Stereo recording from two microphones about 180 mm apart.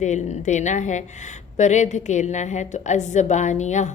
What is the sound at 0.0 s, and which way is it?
A woman's voice, 40° left (ahead or behind).